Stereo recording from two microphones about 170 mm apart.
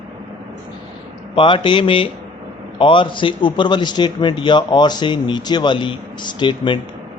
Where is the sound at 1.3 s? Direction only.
30° left (ahead or behind).